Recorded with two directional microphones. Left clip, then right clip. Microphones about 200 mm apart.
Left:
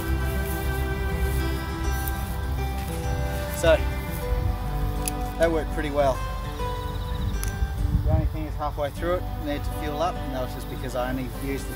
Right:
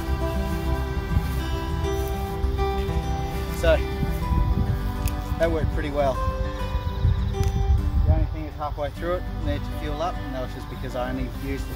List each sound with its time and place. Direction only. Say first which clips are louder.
3.6 s speech: left 1 dB; centre (ahead or behind)
5.4 s speech: left 1 dB; 5° right (ahead or behind)
8.5 s speech: left 1 dB; 5° right (ahead or behind)